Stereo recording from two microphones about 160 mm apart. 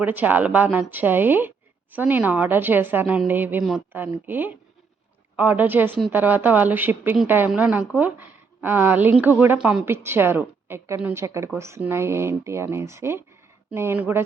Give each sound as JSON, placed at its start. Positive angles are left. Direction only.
{"t": 0.0, "sound": "a woman's voice", "side_deg": -10}